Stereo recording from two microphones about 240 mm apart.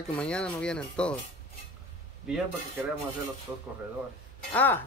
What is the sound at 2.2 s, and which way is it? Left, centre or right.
Speech, centre.